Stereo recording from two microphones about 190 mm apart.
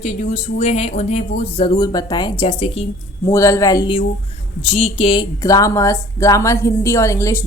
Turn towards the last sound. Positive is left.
turn(degrees=15)  # may be behind; listen again after turning